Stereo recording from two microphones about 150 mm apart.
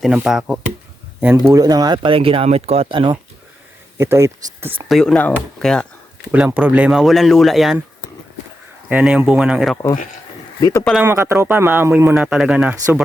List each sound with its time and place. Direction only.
0.0 s speech: 5° right (ahead or behind)
1.5 s speech: 25° right (ahead or behind)
2.0 s speech: 40° right (ahead or behind)
3.9 s speech: 20° right (ahead or behind)
4.9 s speech: centre (ahead or behind)
6.3 s speech: 10° right (ahead or behind)
8.9 s speech: 5° right (ahead or behind)
10.6 s speech: 20° left (ahead or behind)
11.0 s speech: 20° right (ahead or behind)
12.1 s speech: 5° right (ahead or behind)